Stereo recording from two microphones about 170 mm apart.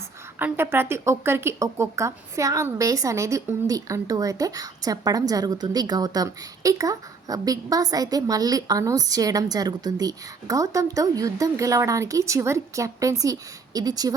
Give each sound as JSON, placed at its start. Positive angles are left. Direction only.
{"t": 0.3, "sound": "speech", "side_deg": -10}